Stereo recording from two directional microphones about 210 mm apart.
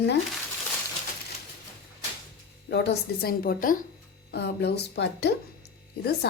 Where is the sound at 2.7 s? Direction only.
50° left (ahead or behind).